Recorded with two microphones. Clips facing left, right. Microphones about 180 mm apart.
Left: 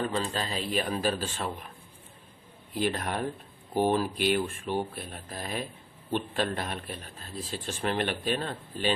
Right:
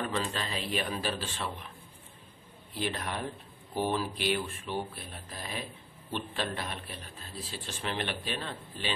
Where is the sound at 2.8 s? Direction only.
50° left (ahead or behind).